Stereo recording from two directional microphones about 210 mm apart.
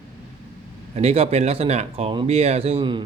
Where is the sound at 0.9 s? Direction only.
30° right (ahead or behind).